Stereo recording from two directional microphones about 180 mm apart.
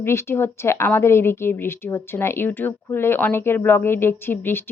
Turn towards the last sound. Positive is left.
turn(degrees=10)  # may be behind; listen again after turning